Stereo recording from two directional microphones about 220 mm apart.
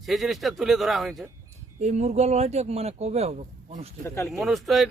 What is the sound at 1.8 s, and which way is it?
Speech, 30° right (ahead or behind).